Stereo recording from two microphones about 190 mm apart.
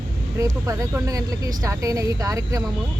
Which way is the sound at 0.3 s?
15° right (ahead or behind).